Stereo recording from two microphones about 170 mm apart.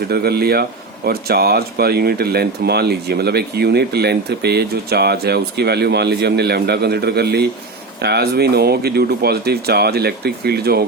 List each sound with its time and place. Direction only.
0.1 s speech: 65° right (ahead or behind)